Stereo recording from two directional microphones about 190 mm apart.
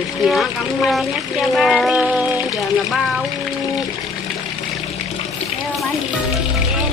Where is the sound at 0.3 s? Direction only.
Centre (ahead or behind).